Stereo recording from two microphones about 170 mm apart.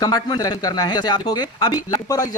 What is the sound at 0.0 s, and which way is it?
Speech, 20° left (ahead or behind).